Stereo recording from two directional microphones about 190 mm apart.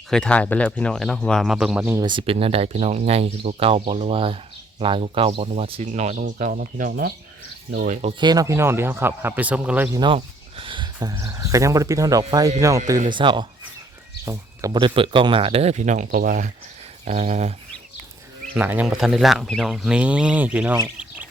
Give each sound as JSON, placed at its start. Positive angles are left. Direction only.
{"t": 0.1, "sound": "speech", "side_deg": 5}
{"t": 2.0, "sound": "speech", "side_deg": -25}
{"t": 8.2, "sound": "a man's voice", "side_deg": -20}
{"t": 10.0, "sound": "a sound", "side_deg": -25}
{"t": 11.1, "sound": "a man's voice", "side_deg": -15}
{"t": 18.5, "sound": "speech", "side_deg": -10}